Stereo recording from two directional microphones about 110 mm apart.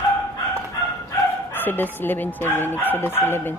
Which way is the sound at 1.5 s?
20° left (ahead or behind).